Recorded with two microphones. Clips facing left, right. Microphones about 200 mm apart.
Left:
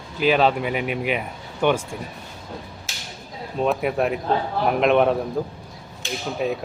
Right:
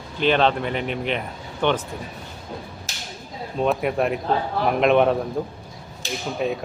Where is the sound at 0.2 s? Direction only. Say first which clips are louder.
Left 1 dB; 5° left (ahead or behind).